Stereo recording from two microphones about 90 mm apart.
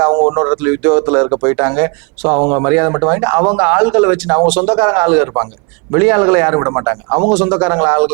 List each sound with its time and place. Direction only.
0.3 s speech: 20° right (ahead or behind)